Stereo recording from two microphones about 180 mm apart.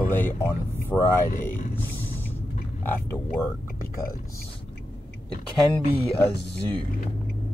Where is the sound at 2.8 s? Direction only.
10° left (ahead or behind).